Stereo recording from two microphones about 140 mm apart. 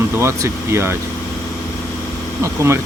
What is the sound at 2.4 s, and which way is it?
Speech, 20° right (ahead or behind).